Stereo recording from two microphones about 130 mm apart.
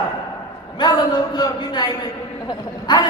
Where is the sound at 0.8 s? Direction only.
30° left (ahead or behind).